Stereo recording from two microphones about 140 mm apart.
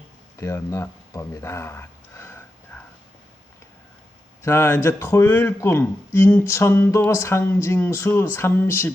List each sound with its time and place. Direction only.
0.3 s speech: 20° left (ahead or behind)
2.7 s a sound: 10° left (ahead or behind)
4.4 s speech: 20° left (ahead or behind)